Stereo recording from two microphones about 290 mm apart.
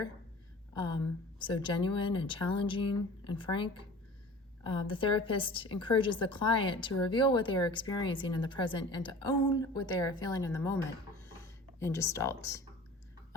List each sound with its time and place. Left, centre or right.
1.5 s a woman's voice: centre